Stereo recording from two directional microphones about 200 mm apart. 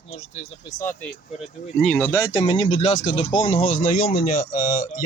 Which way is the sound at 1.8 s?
5° left (ahead or behind).